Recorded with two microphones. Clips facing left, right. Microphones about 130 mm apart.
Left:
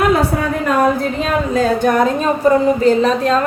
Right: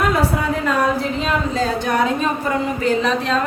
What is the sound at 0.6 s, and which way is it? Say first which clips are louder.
A woman's voice: left 6 dB; 50° left (ahead or behind).